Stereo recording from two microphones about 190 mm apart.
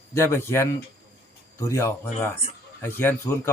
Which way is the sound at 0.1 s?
15° left (ahead or behind).